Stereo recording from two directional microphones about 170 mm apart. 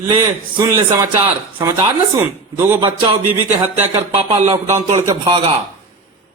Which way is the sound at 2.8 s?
30° right (ahead or behind).